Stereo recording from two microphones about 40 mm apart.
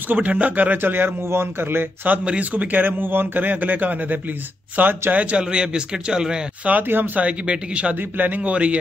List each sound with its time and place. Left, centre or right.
0.1 s speech: right
0.7 s speech: right
2.5 s a man's voice: right
5.1 s speech: right
6.8 s speech: right
7.2 s speech: right
7.9 s a man's voice: right
8.4 s speech: right